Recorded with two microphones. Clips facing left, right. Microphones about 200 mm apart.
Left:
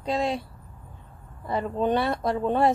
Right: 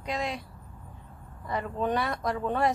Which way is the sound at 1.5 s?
30° left (ahead or behind).